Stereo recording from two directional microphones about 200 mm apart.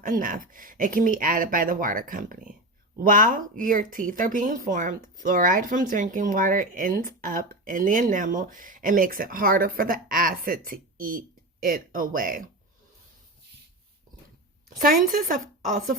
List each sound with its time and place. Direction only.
0.0 s speech: 45° right (ahead or behind)
14.8 s speech: 45° right (ahead or behind)